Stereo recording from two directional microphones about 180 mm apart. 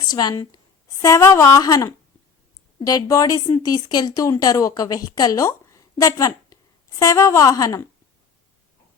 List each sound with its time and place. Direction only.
0.0 s a woman's voice: 25° left (ahead or behind)